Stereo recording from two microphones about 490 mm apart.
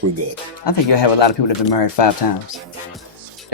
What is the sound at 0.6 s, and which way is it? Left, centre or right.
Speech, left.